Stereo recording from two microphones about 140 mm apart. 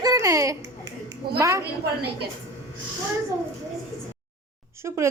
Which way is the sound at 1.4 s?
20° right (ahead or behind).